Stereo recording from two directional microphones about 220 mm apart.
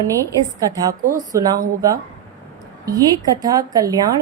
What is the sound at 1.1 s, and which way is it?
Speech, 15° right (ahead or behind).